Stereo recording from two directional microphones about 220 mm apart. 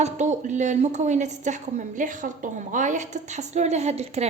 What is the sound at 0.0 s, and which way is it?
A woman's voice, 30° right (ahead or behind).